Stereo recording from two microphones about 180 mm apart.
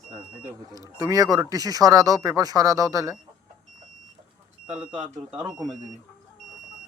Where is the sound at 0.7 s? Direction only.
20° right (ahead or behind).